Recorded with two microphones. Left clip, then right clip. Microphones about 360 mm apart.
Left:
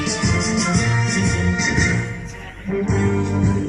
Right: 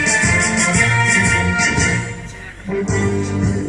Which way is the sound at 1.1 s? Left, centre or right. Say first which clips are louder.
Right 8 dB; right.